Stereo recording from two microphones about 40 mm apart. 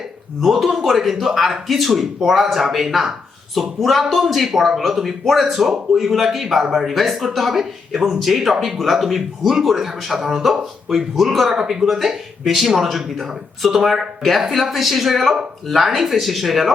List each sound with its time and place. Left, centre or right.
0.5 s speech: centre